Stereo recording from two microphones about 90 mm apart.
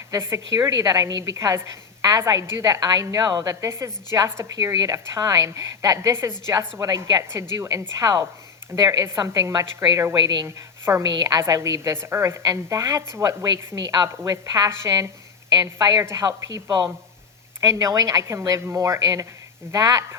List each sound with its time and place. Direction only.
0.1 s a woman's voice: 35° right (ahead or behind); by 3.5 s 50° right (ahead or behind)
3.5 s a woman's voice: 35° right (ahead or behind)
9.0 s a woman's voice: 30° right (ahead or behind)
9.3 s a woman's voice: 45° right (ahead or behind)
10.4 s a woman's voice: 30° right (ahead or behind)
11.2 s a woman's voice: 45° right (ahead or behind)
14.7 s a woman's voice: 35° right (ahead or behind)
15.4 s a woman's voice: 45° right (ahead or behind)
17.6 s a woman's voice: 35° right (ahead or behind)